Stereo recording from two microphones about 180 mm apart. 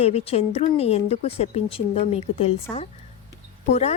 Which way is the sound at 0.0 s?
35° left (ahead or behind).